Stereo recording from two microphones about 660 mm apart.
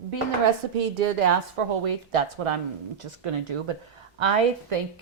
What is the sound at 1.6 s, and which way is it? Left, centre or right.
A woman's voice, right.